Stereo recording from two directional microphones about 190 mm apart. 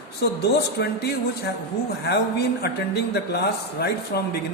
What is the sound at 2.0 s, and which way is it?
Speech, 60° left (ahead or behind).